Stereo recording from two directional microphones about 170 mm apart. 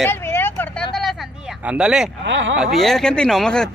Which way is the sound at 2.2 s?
90° right.